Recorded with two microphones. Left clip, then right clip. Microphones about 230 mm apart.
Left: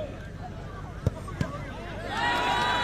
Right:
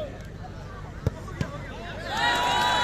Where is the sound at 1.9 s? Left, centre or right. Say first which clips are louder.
Right 3 dB; right.